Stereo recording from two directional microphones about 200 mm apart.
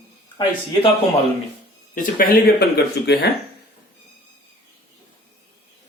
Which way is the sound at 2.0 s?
45° left (ahead or behind).